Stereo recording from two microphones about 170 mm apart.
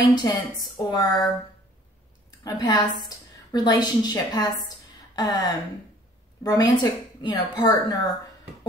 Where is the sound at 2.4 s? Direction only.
25° left (ahead or behind).